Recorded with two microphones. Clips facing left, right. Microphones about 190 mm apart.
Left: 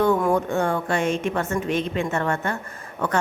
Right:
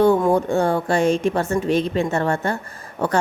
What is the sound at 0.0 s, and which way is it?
A woman's voice, 25° right (ahead or behind).